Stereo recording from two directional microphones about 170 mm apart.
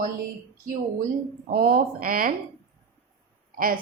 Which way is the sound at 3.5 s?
55° right (ahead or behind).